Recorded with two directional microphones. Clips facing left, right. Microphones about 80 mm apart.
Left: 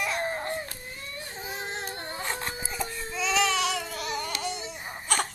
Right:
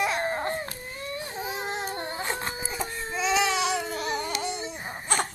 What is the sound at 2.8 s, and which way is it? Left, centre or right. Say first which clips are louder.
Baby cry: right 3 dB; right.